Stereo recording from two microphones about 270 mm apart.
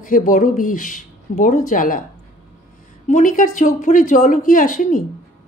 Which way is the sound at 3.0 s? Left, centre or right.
Left.